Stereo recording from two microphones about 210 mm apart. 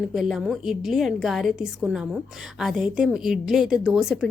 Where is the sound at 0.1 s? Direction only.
Centre (ahead or behind).